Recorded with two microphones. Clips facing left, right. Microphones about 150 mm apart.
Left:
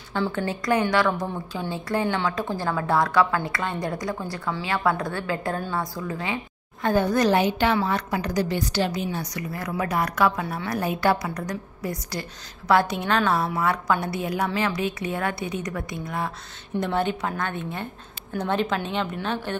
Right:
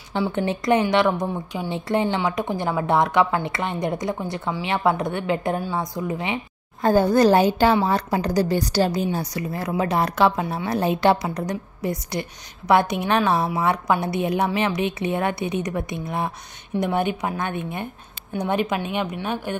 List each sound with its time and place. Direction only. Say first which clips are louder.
0.1 s a woman's voice: right 3 dB; 15° right (ahead or behind)
6.8 s a woman's voice: right 5 dB; 35° right (ahead or behind); by 19.5 s 10° right (ahead or behind)